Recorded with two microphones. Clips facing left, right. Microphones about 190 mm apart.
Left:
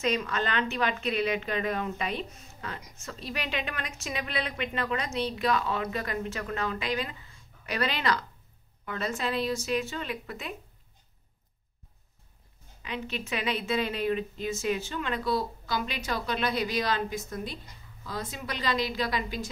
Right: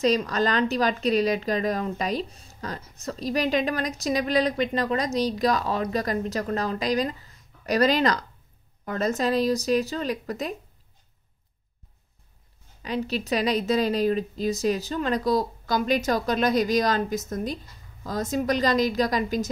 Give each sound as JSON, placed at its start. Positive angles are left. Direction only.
{"t": 0.0, "sound": "a woman's voice", "side_deg": -35}
{"t": 12.8, "sound": "a woman's voice", "side_deg": -35}